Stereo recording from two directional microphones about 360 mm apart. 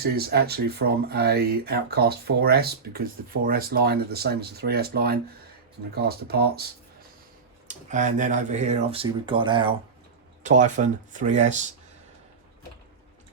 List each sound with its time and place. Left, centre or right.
0.0 s speech: right
7.7 s speech: centre